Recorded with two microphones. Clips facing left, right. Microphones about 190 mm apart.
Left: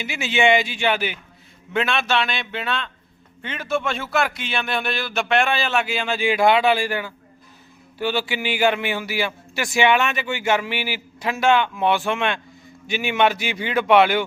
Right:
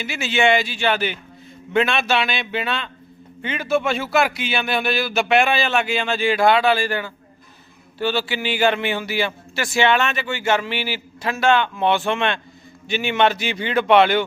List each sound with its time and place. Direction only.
0.0 s a man's voice: 15° left (ahead or behind)
1.7 s a man's voice: centre (ahead or behind)